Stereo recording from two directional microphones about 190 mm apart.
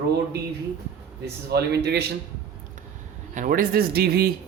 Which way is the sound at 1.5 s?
60° right (ahead or behind).